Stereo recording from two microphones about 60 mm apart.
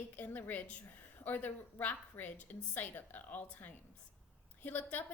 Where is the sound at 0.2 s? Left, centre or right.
Left.